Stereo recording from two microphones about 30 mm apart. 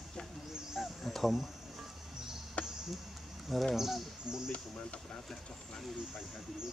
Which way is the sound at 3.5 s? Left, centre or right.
Centre.